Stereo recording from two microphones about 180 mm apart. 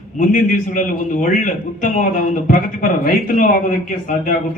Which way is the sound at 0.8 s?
45° left (ahead or behind).